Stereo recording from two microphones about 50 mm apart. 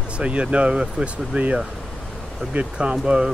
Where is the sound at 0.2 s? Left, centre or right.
Right.